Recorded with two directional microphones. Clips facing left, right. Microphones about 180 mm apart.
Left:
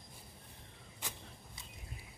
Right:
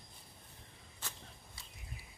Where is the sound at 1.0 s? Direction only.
15° left (ahead or behind).